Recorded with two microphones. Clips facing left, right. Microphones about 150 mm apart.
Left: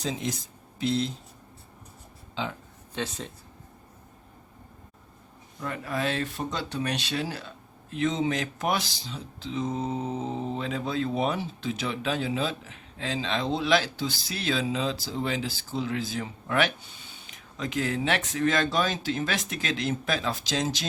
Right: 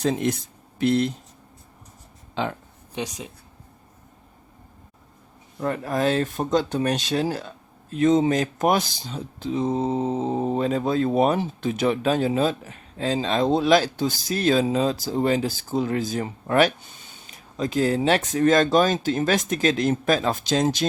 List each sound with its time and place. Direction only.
0.0 s speech: 60° right (ahead or behind)
2.3 s speech: 55° right (ahead or behind)
2.9 s speech: 15° right (ahead or behind)
5.5 s speech: 45° right (ahead or behind)
9.6 s mantra: 30° right (ahead or behind)
10.3 s speech: 50° right (ahead or behind)